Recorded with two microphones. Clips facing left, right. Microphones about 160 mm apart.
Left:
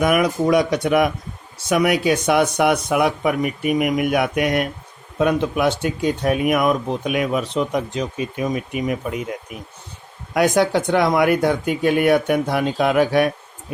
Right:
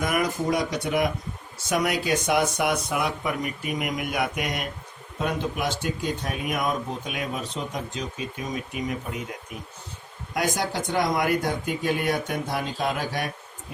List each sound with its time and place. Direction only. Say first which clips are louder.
0.0 s speech: left 8 dB; 70° left (ahead or behind)
10.3 s speech: left 10 dB; 70° left (ahead or behind)